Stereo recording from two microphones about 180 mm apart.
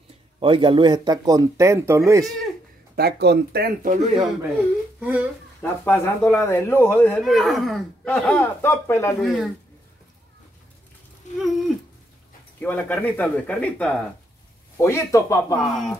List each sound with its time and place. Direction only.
0.4 s speech: 30° right (ahead or behind)
3.0 s speech: 65° right (ahead or behind); by 4.1 s 50° right (ahead or behind)
5.0 s speech: 10° right (ahead or behind)
5.6 s speech: 10° left (ahead or behind)
7.2 s speech: centre (ahead or behind)
9.2 s speech: centre (ahead or behind)
11.3 s a sound: centre (ahead or behind)
12.5 s speech: 10° left (ahead or behind)
15.5 s speech: centre (ahead or behind)